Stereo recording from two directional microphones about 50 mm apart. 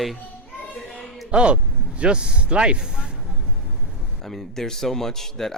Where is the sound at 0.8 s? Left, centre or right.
Centre.